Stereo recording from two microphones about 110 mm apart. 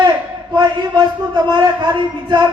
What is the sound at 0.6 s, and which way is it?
A man's voice, 40° right (ahead or behind).